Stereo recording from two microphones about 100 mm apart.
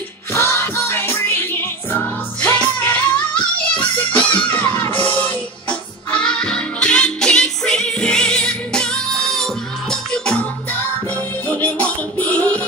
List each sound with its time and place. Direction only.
0.3 s music: 30° left (ahead or behind)